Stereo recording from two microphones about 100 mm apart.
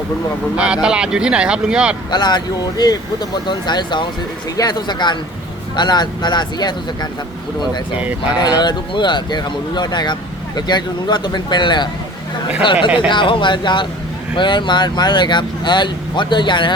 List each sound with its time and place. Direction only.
0.5 s speech: 10° right (ahead or behind)
2.0 s speech: 45° left (ahead or behind)
8.4 s speech: 45° left (ahead or behind)
13.1 s speech: 55° left (ahead or behind)